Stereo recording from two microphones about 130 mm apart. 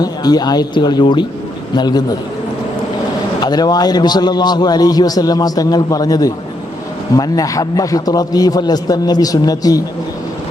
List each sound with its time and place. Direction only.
0.0 s a man's voice: 30° left (ahead or behind)
3.4 s a man's voice: 30° left (ahead or behind)